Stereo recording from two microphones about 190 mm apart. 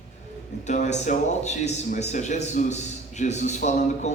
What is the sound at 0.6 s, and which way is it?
Speech, 40° left (ahead or behind).